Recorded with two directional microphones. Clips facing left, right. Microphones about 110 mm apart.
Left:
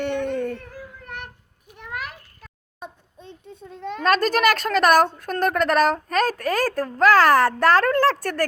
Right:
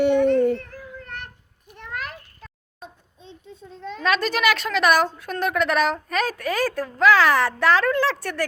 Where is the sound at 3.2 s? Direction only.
55° left (ahead or behind).